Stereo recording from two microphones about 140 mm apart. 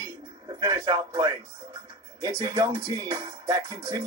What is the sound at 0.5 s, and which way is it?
Music, 30° right (ahead or behind).